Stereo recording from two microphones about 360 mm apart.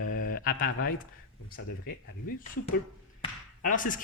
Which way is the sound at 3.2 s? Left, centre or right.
Left.